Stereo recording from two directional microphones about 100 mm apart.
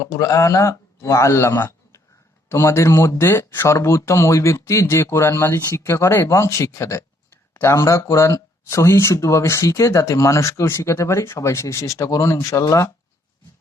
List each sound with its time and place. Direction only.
0.0 s speech: 35° left (ahead or behind)